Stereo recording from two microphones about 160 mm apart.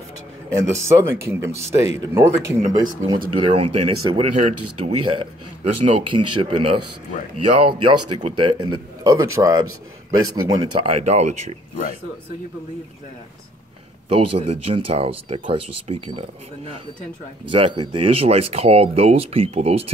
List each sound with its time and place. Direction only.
0.5 s a man's voice: 15° right (ahead or behind)
3.5 s a man's voice: 40° right (ahead or behind)
11.0 s speech: 45° right (ahead or behind)
14.0 s speech: 40° right (ahead or behind)